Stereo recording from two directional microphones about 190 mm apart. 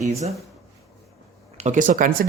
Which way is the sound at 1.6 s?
40° right (ahead or behind).